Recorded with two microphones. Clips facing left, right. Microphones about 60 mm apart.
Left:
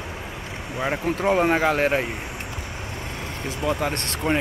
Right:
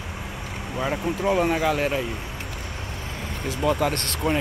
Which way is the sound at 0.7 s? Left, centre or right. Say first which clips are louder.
Left 1 dB; left.